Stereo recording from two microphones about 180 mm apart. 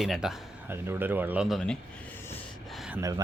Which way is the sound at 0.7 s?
10° right (ahead or behind).